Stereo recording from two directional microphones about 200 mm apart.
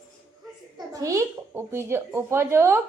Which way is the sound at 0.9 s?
15° right (ahead or behind).